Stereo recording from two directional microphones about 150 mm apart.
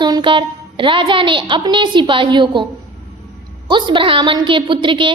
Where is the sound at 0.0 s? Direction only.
30° right (ahead or behind).